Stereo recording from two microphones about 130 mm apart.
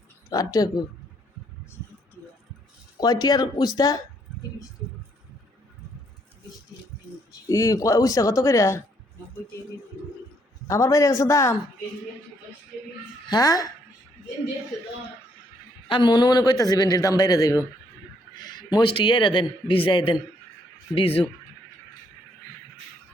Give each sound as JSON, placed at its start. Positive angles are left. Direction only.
{"t": 0.3, "sound": "a man's voice", "side_deg": 30}
{"t": 3.0, "sound": "a man's voice", "side_deg": 30}
{"t": 7.4, "sound": "a man's voice", "side_deg": 25}
{"t": 10.7, "sound": "a man's voice", "side_deg": 25}
{"t": 13.3, "sound": "a man's voice", "side_deg": 30}
{"t": 15.9, "sound": "a man's voice", "side_deg": 35}